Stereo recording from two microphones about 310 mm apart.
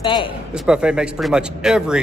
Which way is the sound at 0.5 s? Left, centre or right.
Centre.